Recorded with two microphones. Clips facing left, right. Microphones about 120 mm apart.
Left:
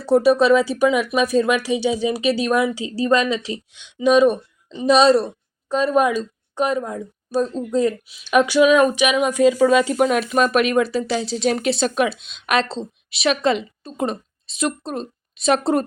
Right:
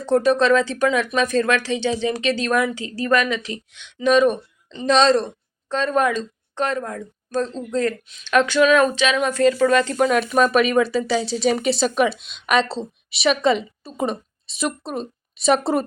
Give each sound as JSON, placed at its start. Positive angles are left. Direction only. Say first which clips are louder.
{"t": 0.0, "sound": "speech", "louder": "left 2 dB", "side_deg": 10}